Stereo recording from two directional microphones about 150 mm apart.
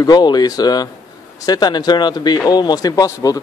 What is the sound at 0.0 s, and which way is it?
A man's voice, 30° left (ahead or behind).